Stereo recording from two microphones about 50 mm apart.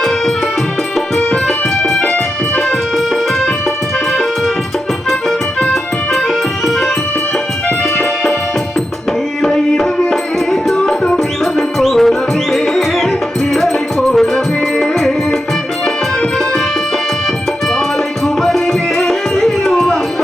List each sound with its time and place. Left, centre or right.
1.1 s music: centre
9.4 s music: centre
18.4 s music: centre